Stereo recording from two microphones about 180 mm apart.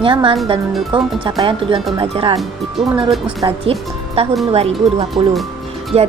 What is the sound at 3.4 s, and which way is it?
A woman's voice, 30° right (ahead or behind).